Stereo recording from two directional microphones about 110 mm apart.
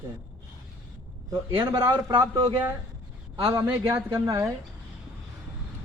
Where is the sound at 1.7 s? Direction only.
25° right (ahead or behind).